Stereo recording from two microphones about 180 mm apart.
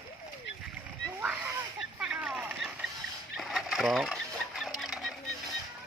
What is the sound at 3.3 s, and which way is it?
Chicken, centre (ahead or behind).